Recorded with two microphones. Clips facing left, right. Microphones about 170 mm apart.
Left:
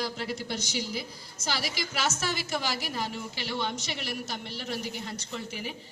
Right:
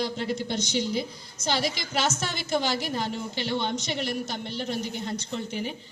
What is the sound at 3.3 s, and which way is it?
Speech, 30° right (ahead or behind).